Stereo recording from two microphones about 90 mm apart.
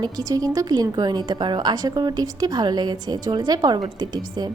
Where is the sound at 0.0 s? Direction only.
45° right (ahead or behind).